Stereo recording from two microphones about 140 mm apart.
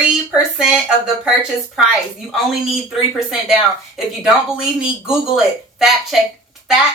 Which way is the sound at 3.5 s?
5° right (ahead or behind).